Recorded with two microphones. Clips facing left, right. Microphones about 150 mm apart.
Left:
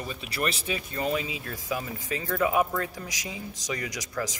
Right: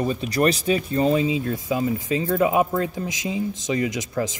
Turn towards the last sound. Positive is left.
turn(degrees=-25)  # may be behind; listen again after turning